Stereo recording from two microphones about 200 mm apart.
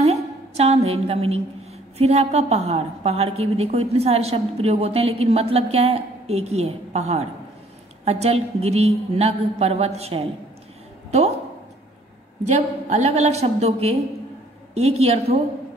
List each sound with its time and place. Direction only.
0.0 s a sound: 30° right (ahead or behind)
2.0 s a woman's voice: 30° right (ahead or behind)
12.4 s a woman's voice: 35° right (ahead or behind)